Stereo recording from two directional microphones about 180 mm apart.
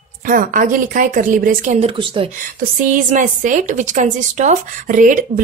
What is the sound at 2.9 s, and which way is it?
Speech, 45° right (ahead or behind).